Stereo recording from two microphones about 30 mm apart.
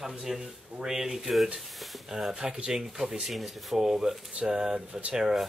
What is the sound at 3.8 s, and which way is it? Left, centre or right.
A man's voice, centre.